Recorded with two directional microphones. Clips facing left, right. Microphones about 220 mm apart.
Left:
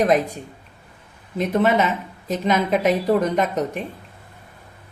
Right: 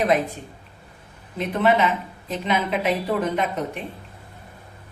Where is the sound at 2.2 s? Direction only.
45° left (ahead or behind).